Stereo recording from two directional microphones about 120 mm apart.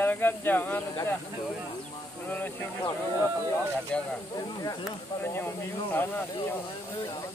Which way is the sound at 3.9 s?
10° left (ahead or behind).